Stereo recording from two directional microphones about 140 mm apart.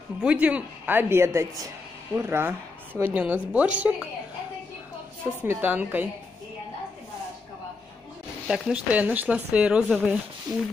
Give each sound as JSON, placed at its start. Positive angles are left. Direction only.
{"t": 0.2, "sound": "a woman's voice", "side_deg": -10}
{"t": 5.4, "sound": "a woman's voice", "side_deg": -15}
{"t": 8.5, "sound": "a woman's voice", "side_deg": -5}